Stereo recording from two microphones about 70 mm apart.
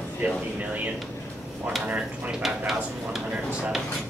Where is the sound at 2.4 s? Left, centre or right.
Centre.